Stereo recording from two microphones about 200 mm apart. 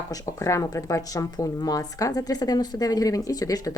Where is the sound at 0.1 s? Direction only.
15° left (ahead or behind).